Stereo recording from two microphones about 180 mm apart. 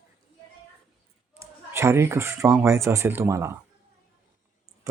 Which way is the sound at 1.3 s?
15° right (ahead or behind).